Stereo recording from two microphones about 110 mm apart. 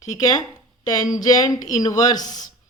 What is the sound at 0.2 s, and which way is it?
Speech, 35° left (ahead or behind).